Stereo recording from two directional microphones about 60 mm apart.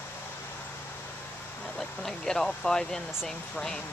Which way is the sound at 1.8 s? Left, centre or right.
Centre.